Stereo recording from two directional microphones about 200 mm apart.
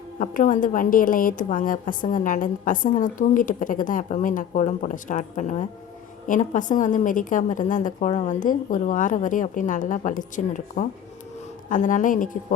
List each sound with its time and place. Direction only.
0.2 s a woman's voice: 40° left (ahead or behind)